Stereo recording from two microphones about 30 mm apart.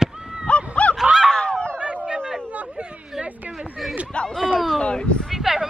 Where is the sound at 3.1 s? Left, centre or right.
Centre.